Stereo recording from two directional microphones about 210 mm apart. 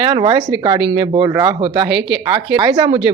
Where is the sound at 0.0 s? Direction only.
20° right (ahead or behind).